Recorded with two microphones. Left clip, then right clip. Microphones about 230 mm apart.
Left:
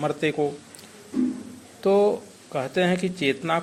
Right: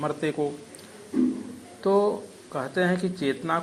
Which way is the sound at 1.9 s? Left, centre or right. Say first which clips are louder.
Left 3 dB; left.